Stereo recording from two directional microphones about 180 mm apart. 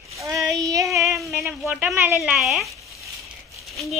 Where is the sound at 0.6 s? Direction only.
20° right (ahead or behind).